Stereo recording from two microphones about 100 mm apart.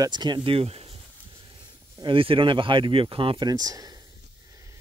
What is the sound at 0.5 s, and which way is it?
Speech, 75° right (ahead or behind).